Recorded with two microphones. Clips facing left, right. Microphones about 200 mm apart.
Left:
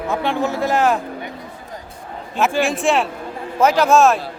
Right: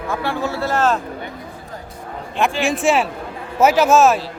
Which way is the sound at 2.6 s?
Centre (ahead or behind).